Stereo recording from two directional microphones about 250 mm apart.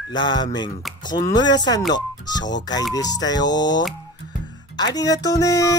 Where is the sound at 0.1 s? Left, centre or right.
Centre.